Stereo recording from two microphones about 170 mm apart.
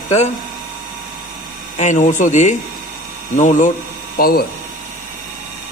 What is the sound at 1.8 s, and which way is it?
Speech, 45° left (ahead or behind).